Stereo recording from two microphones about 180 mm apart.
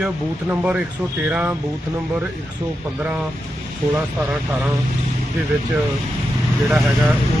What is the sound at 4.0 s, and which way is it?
Speech, 5° right (ahead or behind).